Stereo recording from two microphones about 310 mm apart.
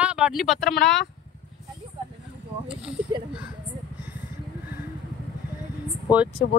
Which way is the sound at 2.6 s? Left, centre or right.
Centre.